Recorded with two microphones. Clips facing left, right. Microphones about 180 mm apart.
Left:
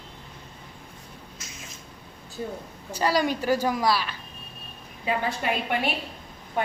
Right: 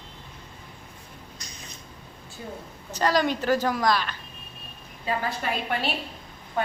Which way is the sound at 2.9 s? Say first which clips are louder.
Right 1 dB; 10° left (ahead or behind).